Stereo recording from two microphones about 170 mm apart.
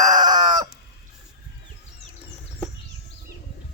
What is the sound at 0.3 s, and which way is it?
Chicken, 45° right (ahead or behind).